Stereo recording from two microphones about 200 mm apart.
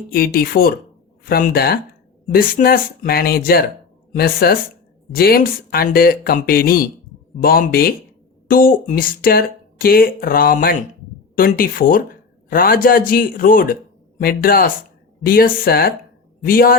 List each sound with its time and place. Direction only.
0.1 s speech: 50° left (ahead or behind)